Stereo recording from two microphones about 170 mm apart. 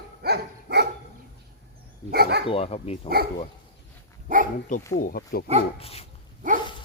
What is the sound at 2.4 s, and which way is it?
Speech, 35° left (ahead or behind).